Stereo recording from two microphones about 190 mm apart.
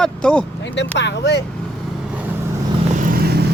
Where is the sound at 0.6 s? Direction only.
70° left (ahead or behind).